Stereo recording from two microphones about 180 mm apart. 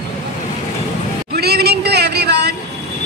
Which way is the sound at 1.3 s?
65° right (ahead or behind).